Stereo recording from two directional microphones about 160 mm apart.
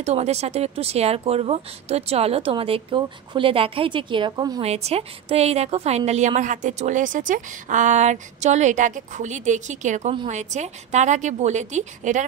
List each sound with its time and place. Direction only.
0.0 s speech: 40° right (ahead or behind)
4.6 s a woman's voice: 40° right (ahead or behind)